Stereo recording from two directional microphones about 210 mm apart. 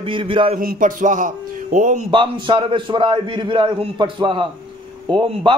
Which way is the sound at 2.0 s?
25° right (ahead or behind).